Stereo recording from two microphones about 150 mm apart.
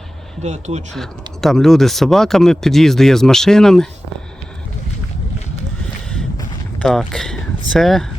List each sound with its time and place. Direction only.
0.4 s speech: 50° right (ahead or behind)
0.9 s speech: centre (ahead or behind)
6.8 s speech: 5° left (ahead or behind)